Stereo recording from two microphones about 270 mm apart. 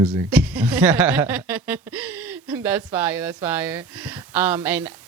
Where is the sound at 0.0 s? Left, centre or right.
Centre.